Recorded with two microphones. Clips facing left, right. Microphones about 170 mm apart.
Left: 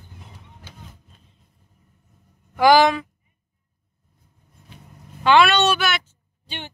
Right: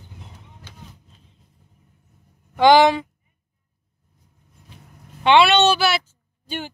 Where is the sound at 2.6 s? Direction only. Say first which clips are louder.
Right 1 dB; 25° right (ahead or behind).